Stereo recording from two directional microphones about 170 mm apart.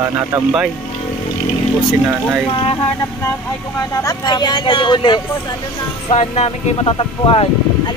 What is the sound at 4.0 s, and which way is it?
Speech, 20° left (ahead or behind).